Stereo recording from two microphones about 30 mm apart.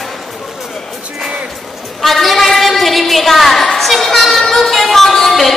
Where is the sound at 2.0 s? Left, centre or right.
Centre.